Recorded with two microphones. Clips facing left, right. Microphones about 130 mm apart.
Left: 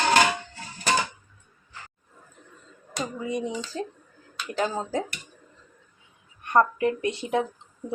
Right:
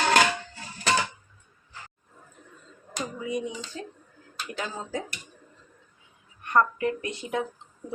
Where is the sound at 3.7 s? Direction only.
40° left (ahead or behind).